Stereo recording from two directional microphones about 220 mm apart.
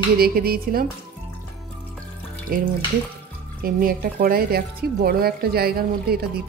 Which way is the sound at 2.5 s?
40° right (ahead or behind).